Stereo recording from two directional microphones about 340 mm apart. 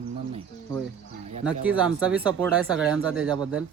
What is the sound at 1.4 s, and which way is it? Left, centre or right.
Speech, centre.